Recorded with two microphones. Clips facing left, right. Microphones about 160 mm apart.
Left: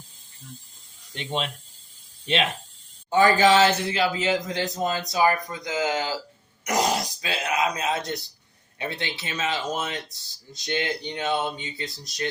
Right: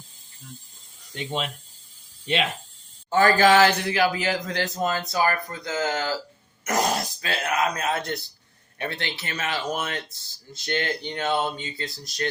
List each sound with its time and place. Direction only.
1.1 s speech: 20° left (ahead or behind)
3.1 s a man's voice: 20° left (ahead or behind)